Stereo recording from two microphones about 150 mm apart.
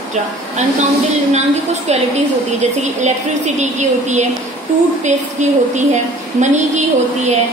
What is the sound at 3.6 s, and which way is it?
A woman's voice, 50° right (ahead or behind).